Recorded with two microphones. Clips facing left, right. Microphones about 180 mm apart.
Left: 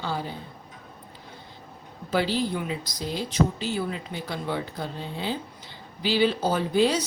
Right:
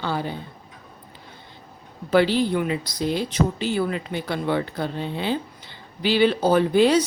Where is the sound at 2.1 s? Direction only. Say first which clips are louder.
Right 6 dB; 65° right (ahead or behind).